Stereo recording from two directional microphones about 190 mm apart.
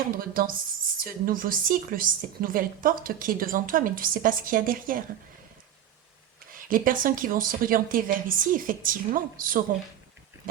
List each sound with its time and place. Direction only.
0.2 s a woman's voice: 50° right (ahead or behind)
6.5 s a woman's voice: 45° right (ahead or behind)
10.5 s a sound: 50° right (ahead or behind)